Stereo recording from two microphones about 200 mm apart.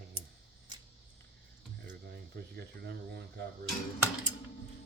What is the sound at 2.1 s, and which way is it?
Speech, 55° right (ahead or behind).